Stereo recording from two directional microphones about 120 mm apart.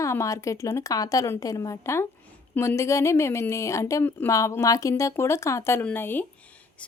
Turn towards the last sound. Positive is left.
turn(degrees=15)  # may be behind; listen again after turning